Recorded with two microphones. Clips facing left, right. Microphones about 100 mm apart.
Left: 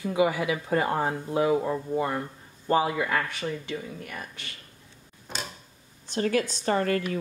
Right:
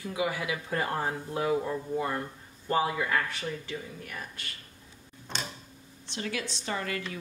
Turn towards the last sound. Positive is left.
turn(degrees=45)  # may be behind; listen again after turning